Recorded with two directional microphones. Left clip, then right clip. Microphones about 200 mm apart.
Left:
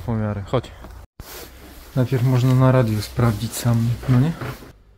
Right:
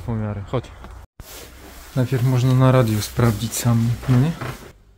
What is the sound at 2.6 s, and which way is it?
Speech, 15° right (ahead or behind).